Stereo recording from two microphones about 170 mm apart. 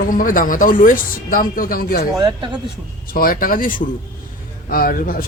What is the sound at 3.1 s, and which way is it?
Speech, 60° left (ahead or behind).